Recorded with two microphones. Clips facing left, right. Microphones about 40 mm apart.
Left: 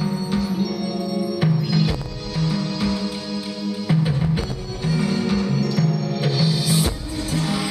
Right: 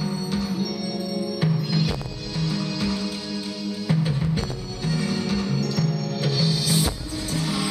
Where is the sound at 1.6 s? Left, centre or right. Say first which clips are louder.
Left 3 dB; centre.